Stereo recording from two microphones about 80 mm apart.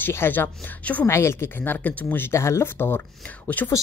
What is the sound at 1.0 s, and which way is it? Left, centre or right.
Speech, left.